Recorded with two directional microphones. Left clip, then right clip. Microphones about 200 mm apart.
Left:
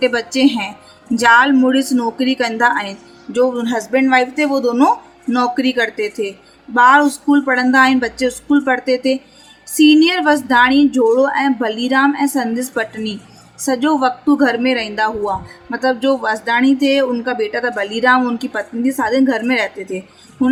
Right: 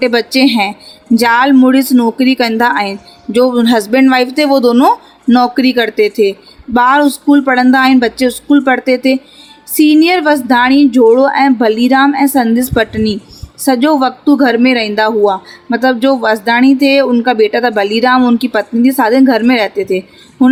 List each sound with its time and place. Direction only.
0.0 s speech: 40° right (ahead or behind)